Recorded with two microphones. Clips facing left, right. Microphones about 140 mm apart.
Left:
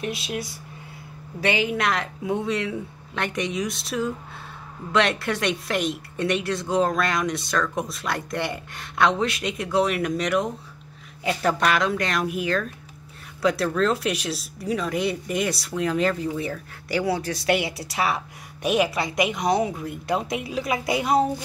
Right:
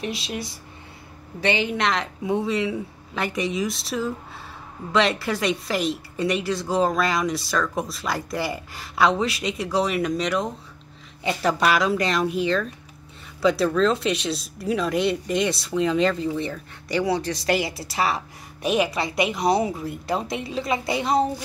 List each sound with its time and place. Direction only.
0.0 s speech: 5° left (ahead or behind)